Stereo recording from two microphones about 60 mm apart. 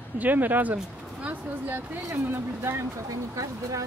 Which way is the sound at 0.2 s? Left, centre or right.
Right.